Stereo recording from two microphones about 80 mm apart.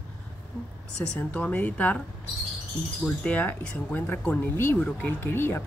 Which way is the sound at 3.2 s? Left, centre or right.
Centre.